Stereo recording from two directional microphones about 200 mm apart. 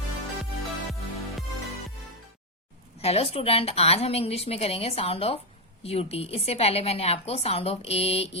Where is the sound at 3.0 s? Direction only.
30° left (ahead or behind).